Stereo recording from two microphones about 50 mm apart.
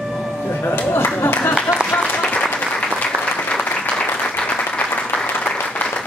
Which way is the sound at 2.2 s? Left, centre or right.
Left.